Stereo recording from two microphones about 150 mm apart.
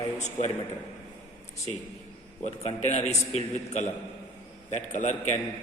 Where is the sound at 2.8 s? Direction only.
50° left (ahead or behind).